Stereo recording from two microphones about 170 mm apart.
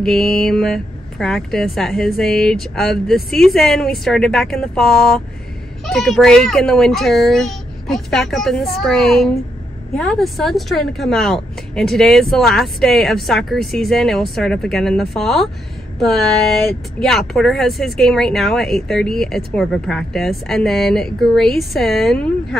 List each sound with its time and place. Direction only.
0.0 s a woman's voice: centre (ahead or behind)